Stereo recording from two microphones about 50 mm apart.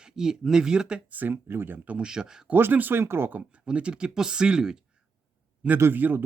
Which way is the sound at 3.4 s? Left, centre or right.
Right.